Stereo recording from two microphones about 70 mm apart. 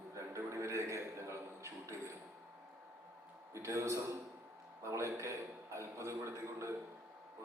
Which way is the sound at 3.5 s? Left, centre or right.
Right.